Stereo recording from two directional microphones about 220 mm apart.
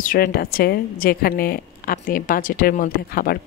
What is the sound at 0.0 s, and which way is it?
Speech, 40° left (ahead or behind).